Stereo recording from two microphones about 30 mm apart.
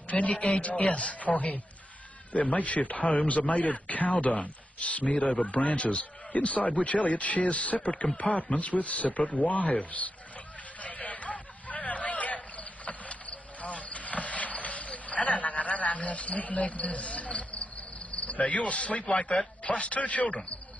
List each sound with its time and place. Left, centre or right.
0.3 s a man's voice: left
10.8 s a sound: left
19.6 s a man's voice: left